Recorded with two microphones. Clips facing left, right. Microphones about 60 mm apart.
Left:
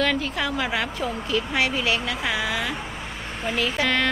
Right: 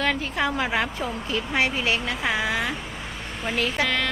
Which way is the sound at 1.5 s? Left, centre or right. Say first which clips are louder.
Right 2 dB; right.